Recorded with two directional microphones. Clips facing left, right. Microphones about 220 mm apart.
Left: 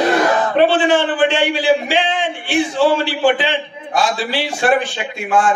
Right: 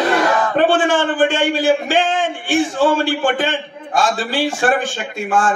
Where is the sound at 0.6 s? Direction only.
50° right (ahead or behind).